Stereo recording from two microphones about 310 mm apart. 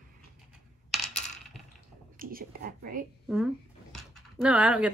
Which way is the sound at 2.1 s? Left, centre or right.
Right.